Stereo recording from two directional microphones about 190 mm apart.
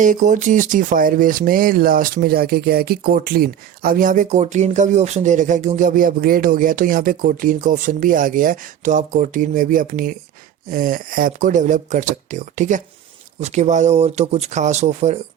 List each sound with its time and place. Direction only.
0.0 s speech: 40° right (ahead or behind)